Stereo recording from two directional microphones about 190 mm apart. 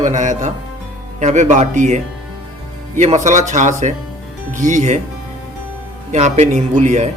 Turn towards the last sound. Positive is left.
turn(degrees=-40)  # may be behind; listen again after turning